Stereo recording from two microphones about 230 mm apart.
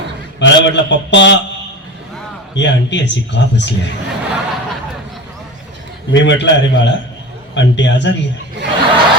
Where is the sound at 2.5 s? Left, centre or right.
Left.